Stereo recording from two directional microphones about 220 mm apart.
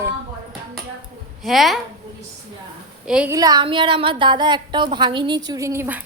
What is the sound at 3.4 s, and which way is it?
A woman's voice, 20° right (ahead or behind).